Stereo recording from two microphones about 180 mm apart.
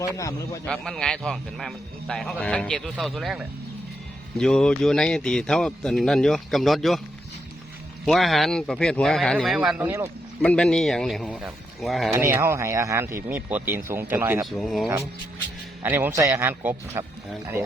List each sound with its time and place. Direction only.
0.0 s a man's voice: 20° left (ahead or behind)
0.6 s a man's voice: 5° left (ahead or behind)
8.0 s a man's voice: centre (ahead or behind)
10.4 s a man's voice: 5° left (ahead or behind)
12.1 s speech: 15° right (ahead or behind)
14.6 s a man's voice: centre (ahead or behind)
15.8 s speech: 10° right (ahead or behind)